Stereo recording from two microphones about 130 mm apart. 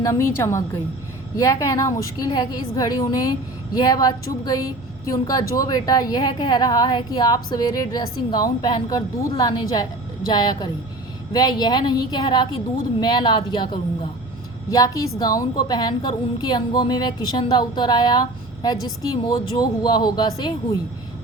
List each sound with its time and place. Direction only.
0.0 s a woman's voice: 25° left (ahead or behind)
14.7 s speech: 30° left (ahead or behind)